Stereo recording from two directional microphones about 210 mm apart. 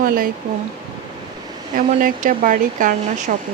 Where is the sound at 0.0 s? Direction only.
40° right (ahead or behind).